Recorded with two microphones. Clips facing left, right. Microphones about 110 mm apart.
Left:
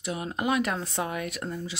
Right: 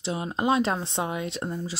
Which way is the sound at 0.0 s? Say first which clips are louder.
Right 3 dB; 25° right (ahead or behind).